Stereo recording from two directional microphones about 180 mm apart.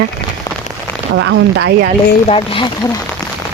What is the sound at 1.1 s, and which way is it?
Speech, 90° right.